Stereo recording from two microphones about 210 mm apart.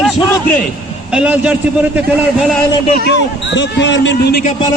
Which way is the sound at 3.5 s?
60° left (ahead or behind).